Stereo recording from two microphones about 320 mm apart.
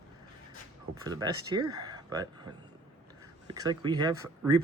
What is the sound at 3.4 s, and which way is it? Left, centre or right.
A man's voice, centre.